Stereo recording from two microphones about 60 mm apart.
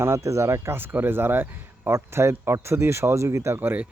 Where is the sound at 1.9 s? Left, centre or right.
Right.